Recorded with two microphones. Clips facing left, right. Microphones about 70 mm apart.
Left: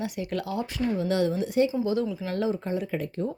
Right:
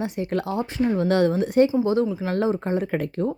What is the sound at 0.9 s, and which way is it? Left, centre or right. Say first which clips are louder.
Speech: right 5 dB; right.